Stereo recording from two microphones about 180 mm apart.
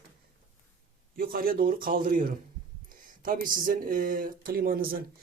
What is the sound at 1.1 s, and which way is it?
Speech, 55° right (ahead or behind).